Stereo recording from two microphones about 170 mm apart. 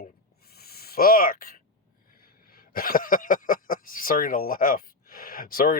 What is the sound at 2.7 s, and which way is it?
Speech, 60° left (ahead or behind).